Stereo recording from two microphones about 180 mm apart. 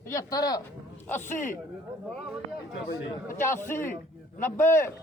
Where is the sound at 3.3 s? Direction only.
15° left (ahead or behind).